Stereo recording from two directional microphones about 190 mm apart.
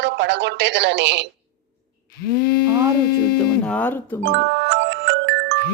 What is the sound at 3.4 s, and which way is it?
Speech, 5° left (ahead or behind).